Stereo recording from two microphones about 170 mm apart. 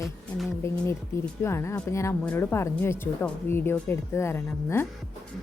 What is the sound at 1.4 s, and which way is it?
Speech, 15° left (ahead or behind).